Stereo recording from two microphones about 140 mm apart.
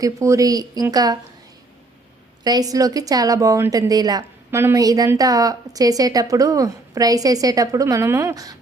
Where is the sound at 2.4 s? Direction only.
30° right (ahead or behind).